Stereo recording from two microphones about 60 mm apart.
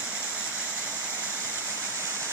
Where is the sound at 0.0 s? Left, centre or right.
Centre.